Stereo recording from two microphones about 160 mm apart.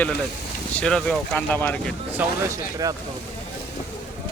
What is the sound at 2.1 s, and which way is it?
Speech, 20° right (ahead or behind).